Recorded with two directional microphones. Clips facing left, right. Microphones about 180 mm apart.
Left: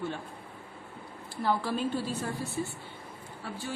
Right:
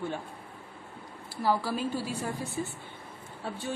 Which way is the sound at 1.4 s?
10° right (ahead or behind).